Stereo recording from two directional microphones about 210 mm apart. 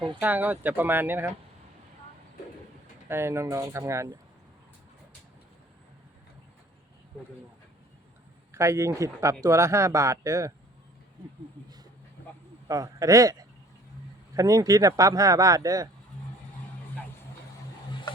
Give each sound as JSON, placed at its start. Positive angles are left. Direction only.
{"t": 0.2, "sound": "speech", "side_deg": -10}
{"t": 3.1, "sound": "speech", "side_deg": -10}
{"t": 8.5, "sound": "speech", "side_deg": -15}
{"t": 12.6, "sound": "speech", "side_deg": -15}
{"t": 14.3, "sound": "speech", "side_deg": -15}